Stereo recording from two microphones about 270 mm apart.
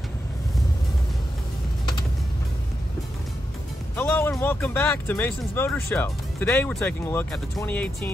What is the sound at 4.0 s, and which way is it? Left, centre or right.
Speech, centre.